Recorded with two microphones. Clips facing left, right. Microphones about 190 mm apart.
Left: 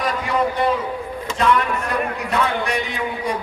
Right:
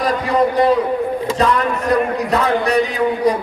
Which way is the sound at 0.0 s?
35° right (ahead or behind).